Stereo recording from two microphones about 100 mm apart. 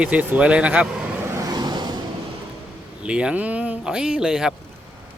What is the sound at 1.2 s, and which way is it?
Vehicle, 25° right (ahead or behind).